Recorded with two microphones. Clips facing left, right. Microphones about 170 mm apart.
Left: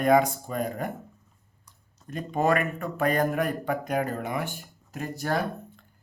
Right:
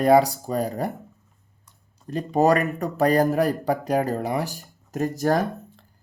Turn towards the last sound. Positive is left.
turn(degrees=-40)  # may be behind; listen again after turning